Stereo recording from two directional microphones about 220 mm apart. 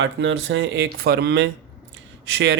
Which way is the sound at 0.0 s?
60° right (ahead or behind).